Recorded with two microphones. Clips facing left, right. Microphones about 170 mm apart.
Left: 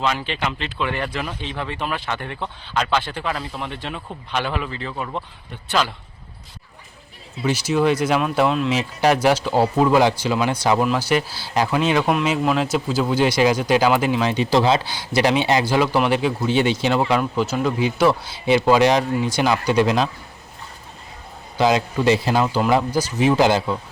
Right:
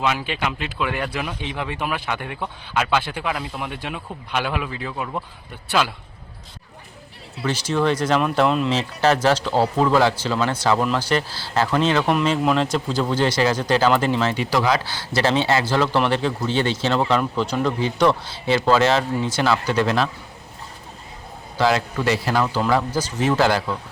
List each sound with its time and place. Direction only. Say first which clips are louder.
0.0 s speech: even; 5° right (ahead or behind)
7.4 s speech: left 2 dB; 10° left (ahead or behind)
8.7 s speech: left 1 dB; 15° left (ahead or behind)
14.9 s speech: left 2 dB; 15° left (ahead or behind)
21.6 s speech: left 2 dB; 20° left (ahead or behind)